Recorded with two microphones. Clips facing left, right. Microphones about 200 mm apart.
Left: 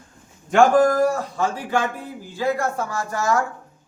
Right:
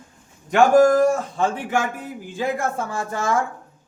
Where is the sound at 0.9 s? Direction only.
25° right (ahead or behind).